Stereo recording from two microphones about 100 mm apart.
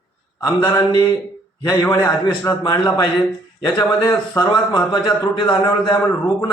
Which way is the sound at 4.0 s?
35° left (ahead or behind).